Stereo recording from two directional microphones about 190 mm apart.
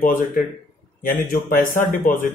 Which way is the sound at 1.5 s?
45° left (ahead or behind).